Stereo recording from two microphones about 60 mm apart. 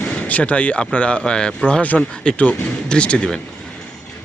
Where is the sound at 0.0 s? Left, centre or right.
Left.